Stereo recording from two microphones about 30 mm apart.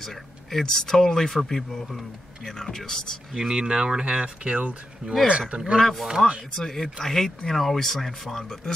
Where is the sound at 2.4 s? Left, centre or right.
Centre.